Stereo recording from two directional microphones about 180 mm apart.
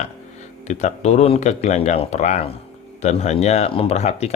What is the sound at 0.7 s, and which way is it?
A man's voice, 40° left (ahead or behind).